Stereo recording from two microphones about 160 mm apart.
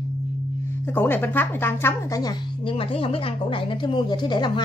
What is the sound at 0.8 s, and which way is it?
A woman's voice, 10° left (ahead or behind).